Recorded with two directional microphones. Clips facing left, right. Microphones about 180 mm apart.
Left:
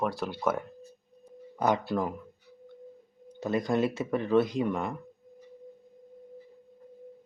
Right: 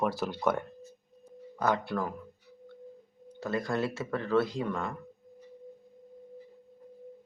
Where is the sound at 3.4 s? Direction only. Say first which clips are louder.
Left 4 dB; 20° left (ahead or behind).